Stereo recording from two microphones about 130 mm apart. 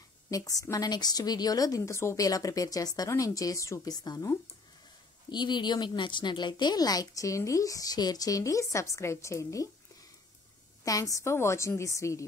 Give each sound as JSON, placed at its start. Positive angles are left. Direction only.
{"t": 0.3, "sound": "a woman's voice", "side_deg": 25}
{"t": 10.8, "sound": "a woman's voice", "side_deg": 25}